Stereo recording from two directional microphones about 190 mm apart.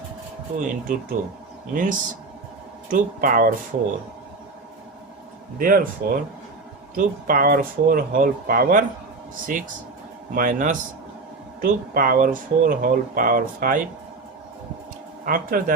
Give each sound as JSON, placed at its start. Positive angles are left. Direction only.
{"t": 0.6, "sound": "speech", "side_deg": -45}
{"t": 5.5, "sound": "speech", "side_deg": -45}
{"t": 15.2, "sound": "speech", "side_deg": -50}